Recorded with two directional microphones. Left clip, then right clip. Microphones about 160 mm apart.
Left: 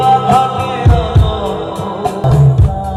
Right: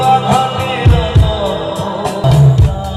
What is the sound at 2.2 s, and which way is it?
Music, 65° left (ahead or behind).